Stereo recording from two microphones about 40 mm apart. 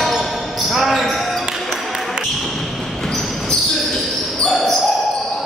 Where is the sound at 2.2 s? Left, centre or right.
Centre.